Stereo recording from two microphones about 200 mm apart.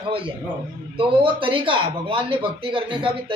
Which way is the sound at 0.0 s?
25° right (ahead or behind).